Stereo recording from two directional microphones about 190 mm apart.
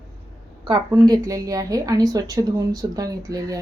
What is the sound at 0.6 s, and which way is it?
A woman's voice, 20° right (ahead or behind).